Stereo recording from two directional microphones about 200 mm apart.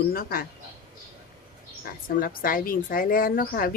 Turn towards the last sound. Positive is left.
turn(degrees=45)  # may be behind; listen again after turning